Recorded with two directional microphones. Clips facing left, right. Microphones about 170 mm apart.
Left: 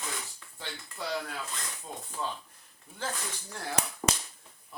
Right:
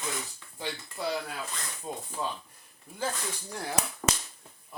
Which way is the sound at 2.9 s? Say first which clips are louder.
Right 4 dB; 10° right (ahead or behind).